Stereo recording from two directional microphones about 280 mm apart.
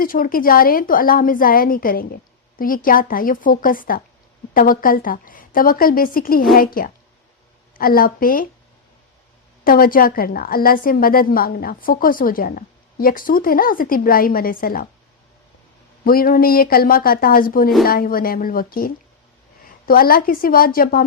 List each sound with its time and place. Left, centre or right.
0.0 s a woman's voice: left
9.6 s a woman's voice: left
16.0 s a woman's voice: left